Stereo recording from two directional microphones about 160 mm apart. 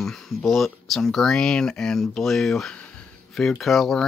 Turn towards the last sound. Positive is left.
turn(degrees=0)  # may be behind; listen again after turning